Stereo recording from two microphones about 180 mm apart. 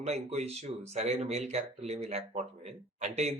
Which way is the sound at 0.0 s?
35° right (ahead or behind).